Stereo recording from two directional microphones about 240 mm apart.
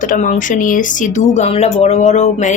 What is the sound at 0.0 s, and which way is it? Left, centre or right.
A woman's voice, left.